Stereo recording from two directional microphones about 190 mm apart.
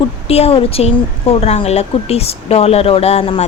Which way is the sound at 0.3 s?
30° left (ahead or behind).